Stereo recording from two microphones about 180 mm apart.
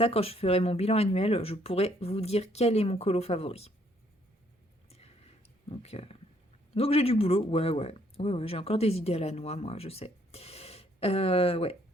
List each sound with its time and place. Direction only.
0.0 s speech: 35° left (ahead or behind)
5.6 s speech: 35° left (ahead or behind)